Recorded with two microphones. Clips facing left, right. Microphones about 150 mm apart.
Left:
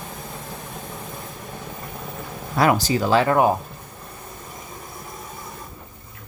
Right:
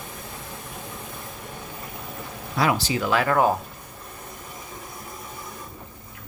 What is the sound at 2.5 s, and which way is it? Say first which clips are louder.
Speech: left 4 dB; 45° left (ahead or behind).